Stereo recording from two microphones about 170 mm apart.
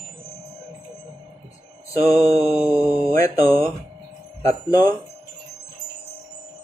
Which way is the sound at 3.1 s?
20° left (ahead or behind).